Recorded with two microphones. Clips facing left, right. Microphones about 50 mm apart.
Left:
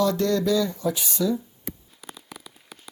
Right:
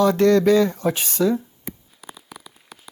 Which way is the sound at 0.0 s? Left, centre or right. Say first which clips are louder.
Right 7 dB; right.